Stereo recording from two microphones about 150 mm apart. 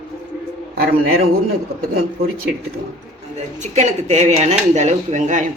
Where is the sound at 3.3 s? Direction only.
50° right (ahead or behind).